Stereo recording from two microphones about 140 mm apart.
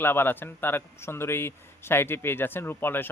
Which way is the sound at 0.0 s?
15° left (ahead or behind).